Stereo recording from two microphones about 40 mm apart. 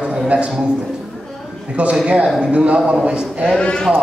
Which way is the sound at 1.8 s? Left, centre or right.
Right.